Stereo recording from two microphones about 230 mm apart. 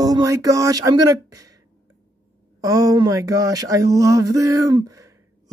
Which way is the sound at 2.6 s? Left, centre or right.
Centre.